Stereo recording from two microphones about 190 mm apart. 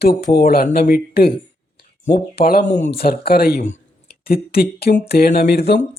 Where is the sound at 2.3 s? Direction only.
50° left (ahead or behind).